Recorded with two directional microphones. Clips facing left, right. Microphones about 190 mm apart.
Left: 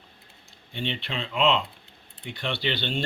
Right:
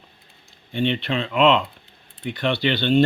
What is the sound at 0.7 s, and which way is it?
Speech, 55° right (ahead or behind).